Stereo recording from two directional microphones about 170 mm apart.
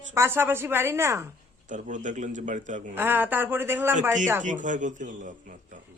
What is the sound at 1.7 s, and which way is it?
A man's voice, 50° right (ahead or behind).